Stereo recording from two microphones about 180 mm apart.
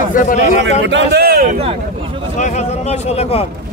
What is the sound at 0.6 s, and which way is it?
Speech, 70° right (ahead or behind).